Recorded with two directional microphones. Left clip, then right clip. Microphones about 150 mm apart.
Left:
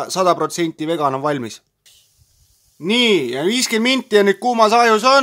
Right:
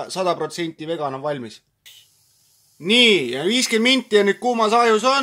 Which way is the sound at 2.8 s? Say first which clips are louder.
Right 1 dB; 40° left (ahead or behind).